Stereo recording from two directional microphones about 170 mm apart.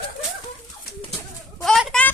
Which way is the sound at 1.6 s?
5° left (ahead or behind).